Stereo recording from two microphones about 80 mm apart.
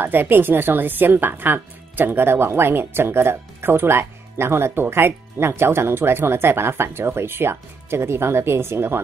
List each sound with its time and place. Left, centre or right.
0.0 s a woman's voice: right